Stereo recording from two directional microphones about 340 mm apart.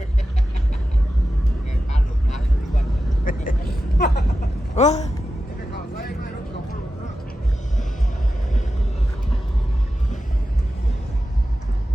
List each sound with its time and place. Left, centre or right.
1.9 s vehicle: left
3.9 s a sound: left
5.7 s vehicle: left